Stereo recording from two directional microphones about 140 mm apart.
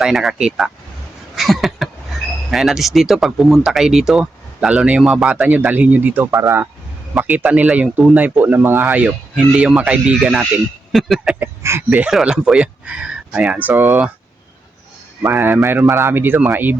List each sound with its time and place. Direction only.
0.0 s speech: centre (ahead or behind)
11.3 s speech: 20° right (ahead or behind)
11.9 s speech: 5° right (ahead or behind)
15.2 s speech: 15° right (ahead or behind)